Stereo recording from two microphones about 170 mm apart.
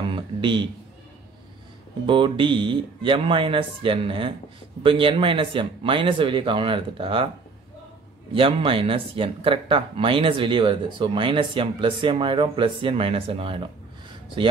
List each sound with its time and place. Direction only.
0.1 s a sound: 30° right (ahead or behind)
2.0 s speech: 30° right (ahead or behind)
8.4 s speech: 30° right (ahead or behind)